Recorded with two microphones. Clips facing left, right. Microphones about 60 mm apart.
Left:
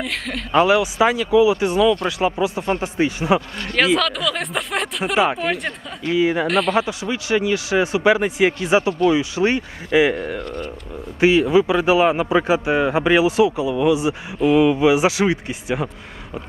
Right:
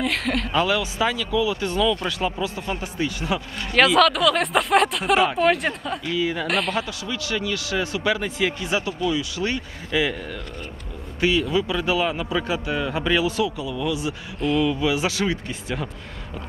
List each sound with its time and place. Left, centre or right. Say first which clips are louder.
0.0 s speech: right 3 dB; centre
0.5 s a man's voice: left 9 dB; left
3.7 s speech: right 2 dB; centre
6.0 s a man's voice: left 8 dB; left
6.4 s speech: left 5 dB; centre
6.7 s a man's voice: left 6 dB; centre
12.4 s a man's voice: left 7 dB; left